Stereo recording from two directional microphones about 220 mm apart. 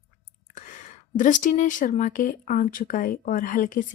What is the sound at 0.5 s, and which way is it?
Speech, 35° left (ahead or behind).